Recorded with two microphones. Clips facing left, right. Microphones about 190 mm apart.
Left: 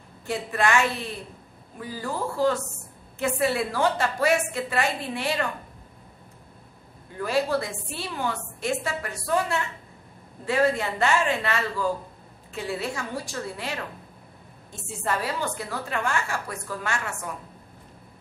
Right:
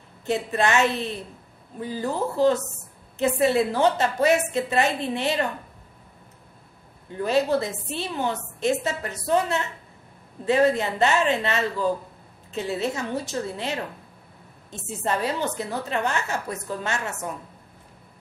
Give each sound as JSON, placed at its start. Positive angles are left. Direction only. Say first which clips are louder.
{"t": 0.3, "sound": "a woman's voice", "louder": "right 2 dB", "side_deg": -20}
{"t": 7.2, "sound": "a woman's voice", "louder": "right 3 dB", "side_deg": -20}